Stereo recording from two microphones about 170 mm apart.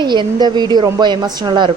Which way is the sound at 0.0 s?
25° right (ahead or behind).